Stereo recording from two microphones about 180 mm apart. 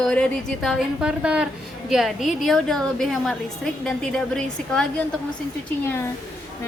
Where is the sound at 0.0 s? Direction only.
5° left (ahead or behind).